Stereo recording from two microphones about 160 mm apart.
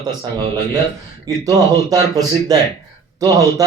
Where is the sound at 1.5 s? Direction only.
25° right (ahead or behind).